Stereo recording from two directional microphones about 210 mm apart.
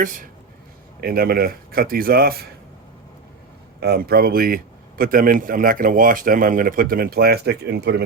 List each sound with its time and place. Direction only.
1.0 s speech: 45° right (ahead or behind)
3.8 s speech: 50° right (ahead or behind)